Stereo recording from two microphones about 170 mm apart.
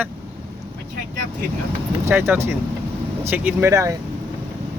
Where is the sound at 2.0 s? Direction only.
10° right (ahead or behind).